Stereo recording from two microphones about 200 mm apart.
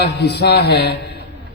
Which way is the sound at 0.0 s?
55° left (ahead or behind).